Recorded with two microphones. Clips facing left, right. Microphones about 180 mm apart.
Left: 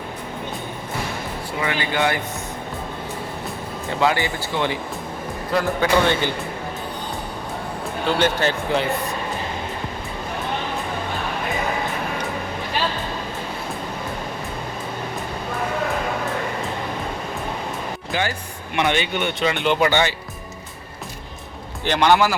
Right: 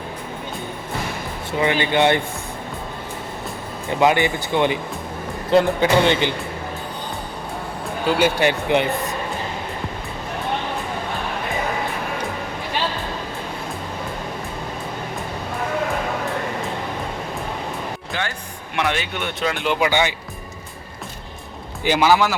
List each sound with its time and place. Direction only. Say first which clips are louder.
1.6 s speech: right 5 dB; 25° right (ahead or behind)
4.0 s speech: right 4 dB; 20° right (ahead or behind)
8.0 s speech: right 2 dB; 10° right (ahead or behind)
18.1 s speech: left 6 dB; 5° left (ahead or behind); by 20.1 s 10° right (ahead or behind)
21.8 s speech: even; 5° right (ahead or behind)